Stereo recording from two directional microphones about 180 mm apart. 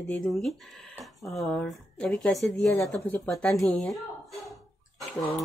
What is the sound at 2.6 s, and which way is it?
Speech, 15° left (ahead or behind).